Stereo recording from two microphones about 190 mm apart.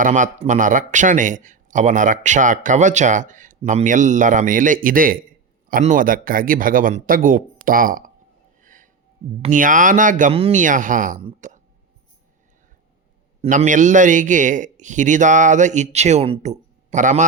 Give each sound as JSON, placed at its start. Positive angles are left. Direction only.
{"t": 0.0, "sound": "a man's voice", "side_deg": -40}
{"t": 8.6, "sound": "music", "side_deg": -45}
{"t": 9.4, "sound": "a man's voice", "side_deg": -45}
{"t": 13.4, "sound": "speech", "side_deg": -35}